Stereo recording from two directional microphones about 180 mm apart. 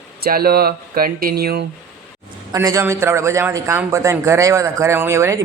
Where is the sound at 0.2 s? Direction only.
55° right (ahead or behind).